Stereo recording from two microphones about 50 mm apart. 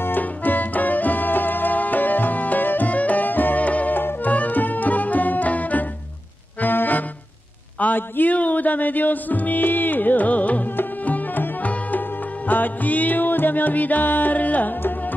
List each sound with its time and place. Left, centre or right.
0.0 s music: left